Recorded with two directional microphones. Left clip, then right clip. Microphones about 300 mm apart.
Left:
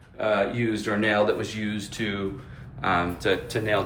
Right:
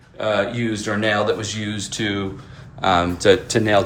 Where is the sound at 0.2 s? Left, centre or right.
Centre.